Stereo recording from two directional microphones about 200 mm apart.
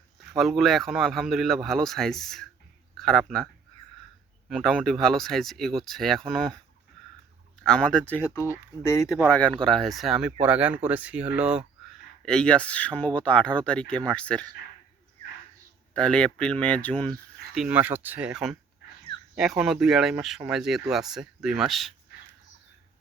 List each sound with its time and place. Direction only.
0.3 s speech: centre (ahead or behind)
7.6 s speech: 5° left (ahead or behind)
9.3 s speech: 5° left (ahead or behind)
16.0 s speech: 5° left (ahead or behind)
17.5 s speech: 5° right (ahead or behind)